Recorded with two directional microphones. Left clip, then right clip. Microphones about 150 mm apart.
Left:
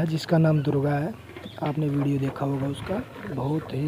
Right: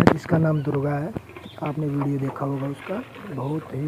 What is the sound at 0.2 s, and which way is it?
Speech, 30° left (ahead or behind).